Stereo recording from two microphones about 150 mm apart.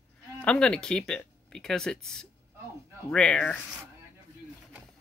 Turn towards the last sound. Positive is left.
turn(degrees=5)  # may be behind; listen again after turning